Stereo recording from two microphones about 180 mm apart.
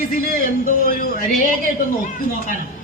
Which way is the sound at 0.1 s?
50° left (ahead or behind).